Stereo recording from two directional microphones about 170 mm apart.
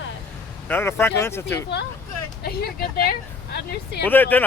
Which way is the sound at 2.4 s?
65° left (ahead or behind).